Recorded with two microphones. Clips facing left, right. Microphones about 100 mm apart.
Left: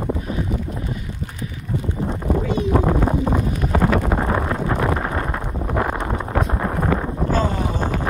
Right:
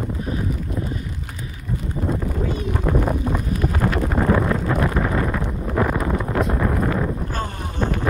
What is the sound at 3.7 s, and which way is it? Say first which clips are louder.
Wind noise: left 7 dB; 90° left.